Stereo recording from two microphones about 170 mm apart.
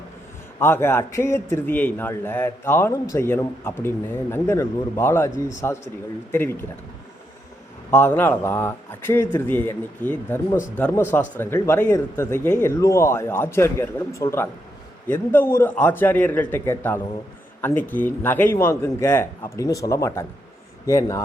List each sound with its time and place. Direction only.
0.6 s speech: 15° left (ahead or behind)
7.9 s speech: 10° left (ahead or behind)